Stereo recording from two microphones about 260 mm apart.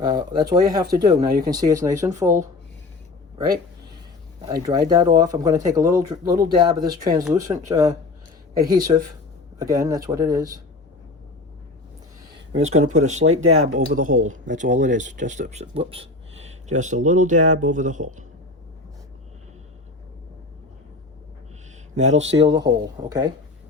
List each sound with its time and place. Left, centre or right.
0.0 s speech: centre
12.7 s speech: right
13.7 s speech: right
21.9 s speech: right